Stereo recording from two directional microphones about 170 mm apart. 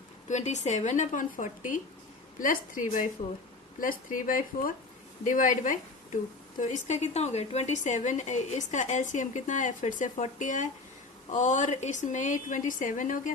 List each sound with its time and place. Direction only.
0.3 s speech: 45° left (ahead or behind)